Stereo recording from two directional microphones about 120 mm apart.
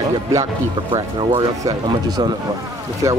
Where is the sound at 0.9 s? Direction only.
45° right (ahead or behind).